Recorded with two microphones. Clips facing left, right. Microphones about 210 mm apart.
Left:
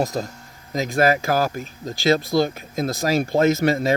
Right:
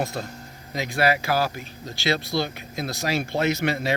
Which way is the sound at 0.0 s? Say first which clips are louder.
Left 5 dB; 40° left (ahead or behind).